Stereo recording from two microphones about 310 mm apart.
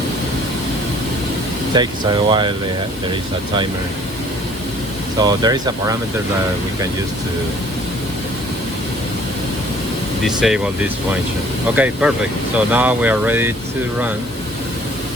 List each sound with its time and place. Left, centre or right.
1.7 s speech: centre
5.2 s speech: centre
10.2 s speech: centre
11.7 s speech: centre